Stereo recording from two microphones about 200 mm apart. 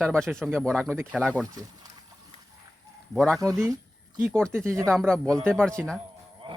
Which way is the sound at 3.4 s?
15° right (ahead or behind).